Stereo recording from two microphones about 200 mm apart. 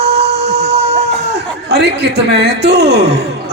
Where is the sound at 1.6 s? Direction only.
55° right (ahead or behind).